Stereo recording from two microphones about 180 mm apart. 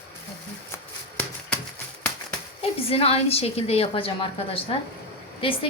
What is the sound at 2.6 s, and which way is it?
A woman's voice, 30° left (ahead or behind).